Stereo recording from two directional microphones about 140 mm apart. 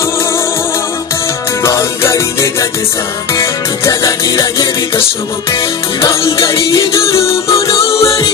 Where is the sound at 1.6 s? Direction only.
20° left (ahead or behind).